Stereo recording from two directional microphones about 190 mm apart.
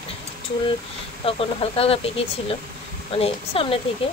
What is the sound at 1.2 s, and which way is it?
Speech, 30° left (ahead or behind).